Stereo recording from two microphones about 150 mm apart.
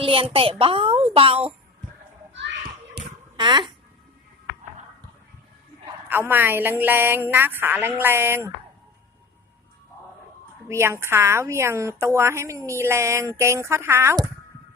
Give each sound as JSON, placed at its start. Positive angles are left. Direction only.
{"t": 0.0, "sound": "a woman's voice", "side_deg": -35}
{"t": 3.0, "sound": "a sound", "side_deg": -90}
{"t": 3.3, "sound": "speech", "side_deg": -30}
{"t": 6.1, "sound": "a woman's voice", "side_deg": -15}
{"t": 10.7, "sound": "a woman's voice", "side_deg": -15}